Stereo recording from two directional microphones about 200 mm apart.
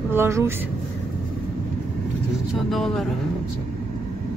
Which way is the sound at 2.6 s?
Centre (ahead or behind).